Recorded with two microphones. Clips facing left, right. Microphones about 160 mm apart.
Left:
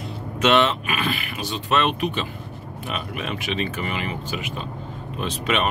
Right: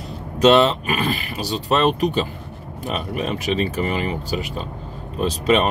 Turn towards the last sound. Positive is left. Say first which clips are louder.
# right 6 dB
turn(degrees=-35)  # may be behind; listen again after turning